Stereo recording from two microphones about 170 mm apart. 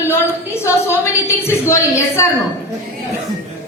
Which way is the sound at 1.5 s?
15° left (ahead or behind).